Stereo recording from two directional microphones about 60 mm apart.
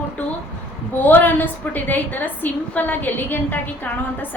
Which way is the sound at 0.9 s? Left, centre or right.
Left.